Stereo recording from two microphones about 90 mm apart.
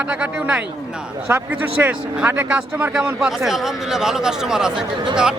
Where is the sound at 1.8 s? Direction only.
20° right (ahead or behind).